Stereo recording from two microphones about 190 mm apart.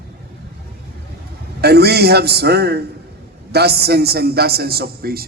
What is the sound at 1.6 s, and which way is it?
A man's voice, 60° right (ahead or behind).